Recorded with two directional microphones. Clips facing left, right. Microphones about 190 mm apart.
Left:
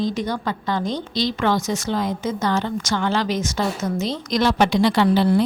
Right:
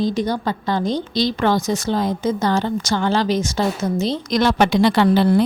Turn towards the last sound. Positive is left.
turn(degrees=-55)  # may be behind; listen again after turning